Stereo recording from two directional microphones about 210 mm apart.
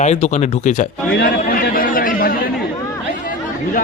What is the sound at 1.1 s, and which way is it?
Chatter, 45° left (ahead or behind).